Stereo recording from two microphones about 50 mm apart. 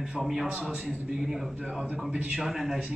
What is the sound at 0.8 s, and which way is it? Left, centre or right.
Speech, centre.